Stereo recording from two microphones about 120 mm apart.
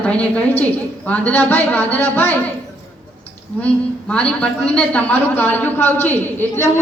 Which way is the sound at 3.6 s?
10° left (ahead or behind).